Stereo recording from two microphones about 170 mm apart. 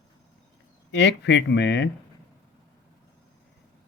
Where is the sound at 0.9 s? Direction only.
90° left.